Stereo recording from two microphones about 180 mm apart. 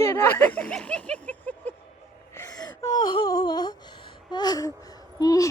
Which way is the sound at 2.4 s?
20° left (ahead or behind).